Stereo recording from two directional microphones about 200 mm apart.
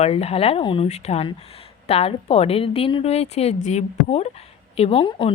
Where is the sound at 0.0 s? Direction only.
30° left (ahead or behind).